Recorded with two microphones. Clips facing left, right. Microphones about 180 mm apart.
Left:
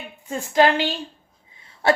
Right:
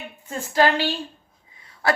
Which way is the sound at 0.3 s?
20° left (ahead or behind).